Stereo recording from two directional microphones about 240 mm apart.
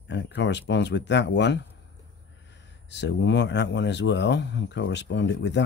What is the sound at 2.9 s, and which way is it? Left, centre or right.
Speech, left.